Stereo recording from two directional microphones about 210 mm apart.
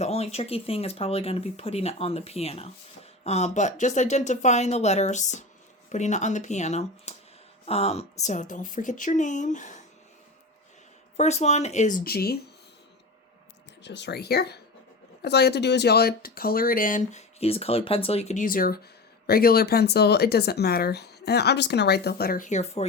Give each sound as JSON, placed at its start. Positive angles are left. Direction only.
{"t": 0.0, "sound": "speech", "side_deg": 30}
{"t": 11.2, "sound": "speech", "side_deg": 30}
{"t": 13.8, "sound": "speech", "side_deg": 55}